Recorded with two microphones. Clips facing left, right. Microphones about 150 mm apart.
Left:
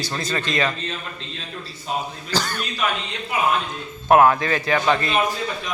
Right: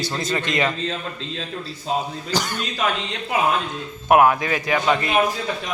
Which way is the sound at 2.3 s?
20° right (ahead or behind).